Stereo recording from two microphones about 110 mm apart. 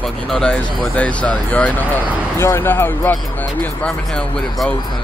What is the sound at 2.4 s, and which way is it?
Speech, 25° left (ahead or behind).